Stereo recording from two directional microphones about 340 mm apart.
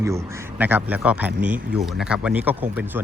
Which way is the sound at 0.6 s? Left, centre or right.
Centre.